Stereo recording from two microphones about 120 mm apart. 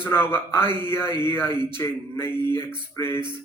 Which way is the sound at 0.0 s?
20° left (ahead or behind).